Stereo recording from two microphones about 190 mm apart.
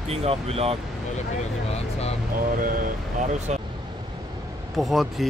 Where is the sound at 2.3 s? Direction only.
45° right (ahead or behind).